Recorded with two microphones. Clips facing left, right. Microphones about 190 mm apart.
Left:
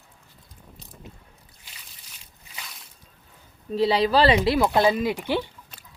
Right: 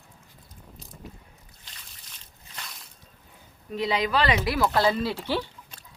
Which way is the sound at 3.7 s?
30° left (ahead or behind).